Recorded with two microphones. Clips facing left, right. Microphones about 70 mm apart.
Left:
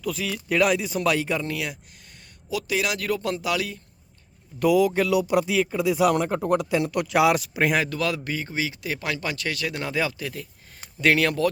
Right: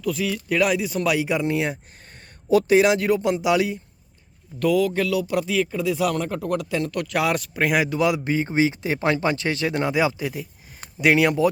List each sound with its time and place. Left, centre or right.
0.0 s speech: centre
1.5 s speech: right
4.6 s speech: centre
7.9 s speech: centre